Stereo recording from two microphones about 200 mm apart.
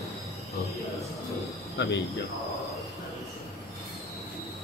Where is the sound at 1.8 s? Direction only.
60° left (ahead or behind).